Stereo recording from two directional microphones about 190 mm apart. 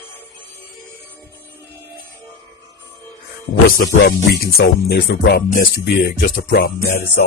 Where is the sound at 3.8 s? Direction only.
55° left (ahead or behind).